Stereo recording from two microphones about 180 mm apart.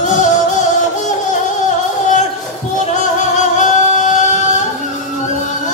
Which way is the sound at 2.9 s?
45° left (ahead or behind).